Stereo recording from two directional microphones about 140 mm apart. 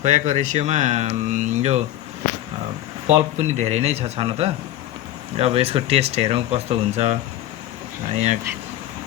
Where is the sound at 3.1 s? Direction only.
50° right (ahead or behind).